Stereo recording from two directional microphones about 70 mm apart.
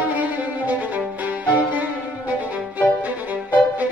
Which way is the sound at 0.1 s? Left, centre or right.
Right.